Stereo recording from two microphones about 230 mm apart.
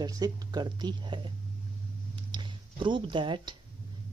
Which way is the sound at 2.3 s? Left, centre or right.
Right.